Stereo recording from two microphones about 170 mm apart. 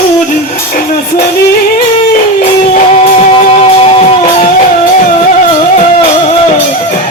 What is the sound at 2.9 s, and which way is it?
Music, 35° left (ahead or behind).